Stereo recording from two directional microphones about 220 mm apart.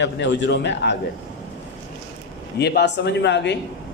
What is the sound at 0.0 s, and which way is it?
Speech, 55° left (ahead or behind).